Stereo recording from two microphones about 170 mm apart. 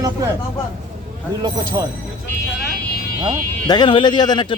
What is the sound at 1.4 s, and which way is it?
Speech, 25° right (ahead or behind).